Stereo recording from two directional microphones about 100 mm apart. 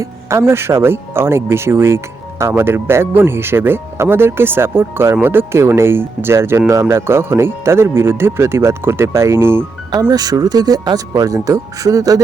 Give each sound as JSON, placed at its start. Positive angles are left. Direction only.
{"t": 0.0, "sound": "speech", "side_deg": -30}
{"t": 10.1, "sound": "speech", "side_deg": -40}